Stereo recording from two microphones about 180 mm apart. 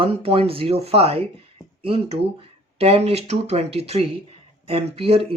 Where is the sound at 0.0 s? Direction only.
30° right (ahead or behind).